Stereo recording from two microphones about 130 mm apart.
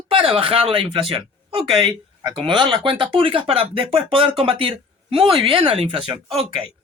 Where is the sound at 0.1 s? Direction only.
45° right (ahead or behind).